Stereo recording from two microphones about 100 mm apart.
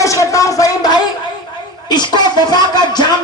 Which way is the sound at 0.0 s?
35° left (ahead or behind).